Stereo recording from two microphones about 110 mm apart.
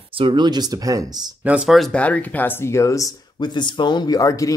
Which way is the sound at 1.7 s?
Centre (ahead or behind).